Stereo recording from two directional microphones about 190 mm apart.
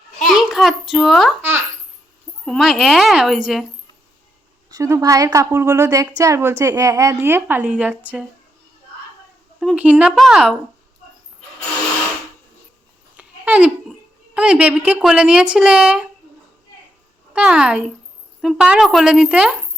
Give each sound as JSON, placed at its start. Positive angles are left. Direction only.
{"t": 0.2, "sound": "child singing", "side_deg": 0}
{"t": 1.4, "sound": "babbling", "side_deg": -10}
{"t": 2.5, "sound": "speech", "side_deg": 0}
{"t": 4.7, "sound": "a woman's voice", "side_deg": -15}
{"t": 9.6, "sound": "speech", "side_deg": -5}
{"t": 13.1, "sound": "babbling", "side_deg": -5}
{"t": 14.3, "sound": "speech", "side_deg": -5}
{"t": 17.3, "sound": "speech", "side_deg": -5}